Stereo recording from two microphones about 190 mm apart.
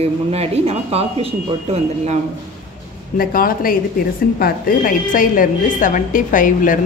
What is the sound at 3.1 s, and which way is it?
A woman's voice, 50° left (ahead or behind).